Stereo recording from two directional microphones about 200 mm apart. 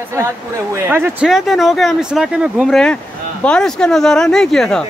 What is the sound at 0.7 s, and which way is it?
Speech, 10° right (ahead or behind).